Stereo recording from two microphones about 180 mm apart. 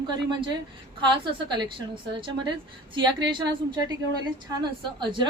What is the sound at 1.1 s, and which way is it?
A woman's voice, 25° right (ahead or behind).